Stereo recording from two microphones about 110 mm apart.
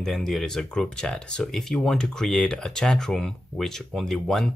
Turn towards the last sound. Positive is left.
turn(degrees=5)  # may be behind; listen again after turning